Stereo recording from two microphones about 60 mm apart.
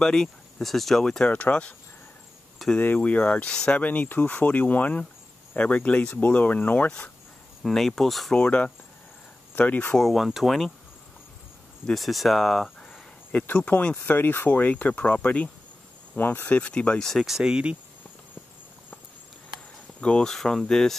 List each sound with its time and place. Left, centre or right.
0.0 s speech: centre
1.3 s speech: left
2.8 s speech: left
3.8 s speech: left
7.6 s speech: centre
8.4 s speech: centre
9.9 s speech: centre
11.9 s speech: centre
13.3 s speech: left
16.2 s speech: left
16.4 s speech: left
17.0 s speech: centre
17.4 s speech: centre
20.0 s speech: centre